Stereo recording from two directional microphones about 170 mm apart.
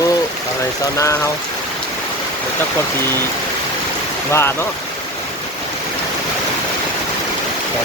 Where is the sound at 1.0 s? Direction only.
20° left (ahead or behind).